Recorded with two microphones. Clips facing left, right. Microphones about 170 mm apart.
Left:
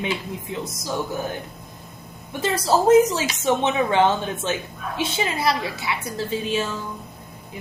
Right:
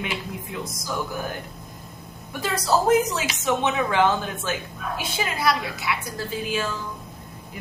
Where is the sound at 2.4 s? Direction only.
30° left (ahead or behind).